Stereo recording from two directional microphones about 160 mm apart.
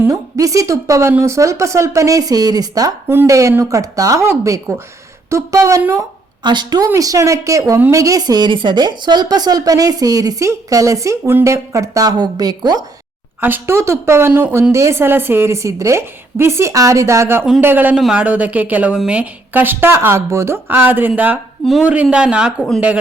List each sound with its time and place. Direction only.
0.0 s a woman's voice: 20° right (ahead or behind)
21.6 s speech: centre (ahead or behind)